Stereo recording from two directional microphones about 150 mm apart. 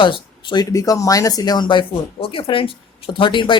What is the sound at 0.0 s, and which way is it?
Speech, 30° left (ahead or behind).